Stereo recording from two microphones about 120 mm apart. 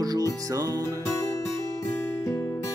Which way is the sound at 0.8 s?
20° left (ahead or behind).